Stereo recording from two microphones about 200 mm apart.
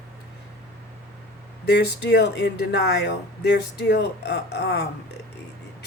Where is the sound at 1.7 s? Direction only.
55° left (ahead or behind).